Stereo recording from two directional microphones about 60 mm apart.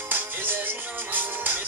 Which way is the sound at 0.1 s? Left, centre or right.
Right.